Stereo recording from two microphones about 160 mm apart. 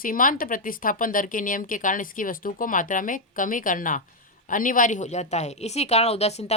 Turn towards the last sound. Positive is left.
turn(degrees=40)  # may be behind; listen again after turning